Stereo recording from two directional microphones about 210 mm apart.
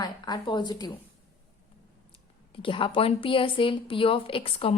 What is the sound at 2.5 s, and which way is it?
Speech, 25° left (ahead or behind).